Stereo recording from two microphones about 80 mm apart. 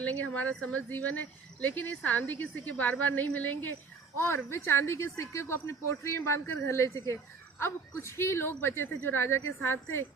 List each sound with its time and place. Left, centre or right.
0.0 s a woman's voice: centre
4.2 s a woman's voice: left